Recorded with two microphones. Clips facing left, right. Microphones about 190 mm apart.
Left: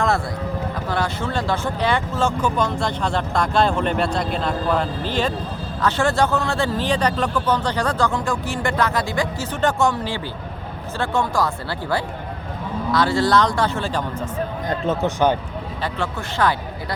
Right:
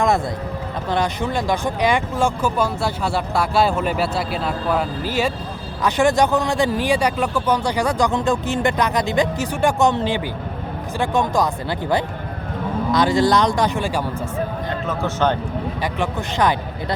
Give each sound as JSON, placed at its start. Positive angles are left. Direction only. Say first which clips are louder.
{"t": 0.9, "sound": "speech", "louder": "right 4 dB", "side_deg": -20}
{"t": 15.0, "sound": "speech", "louder": "even", "side_deg": 10}
{"t": 15.8, "sound": "speech", "louder": "even", "side_deg": -15}